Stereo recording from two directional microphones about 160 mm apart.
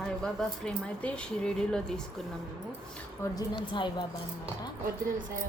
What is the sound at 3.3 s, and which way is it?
Speech, 30° left (ahead or behind).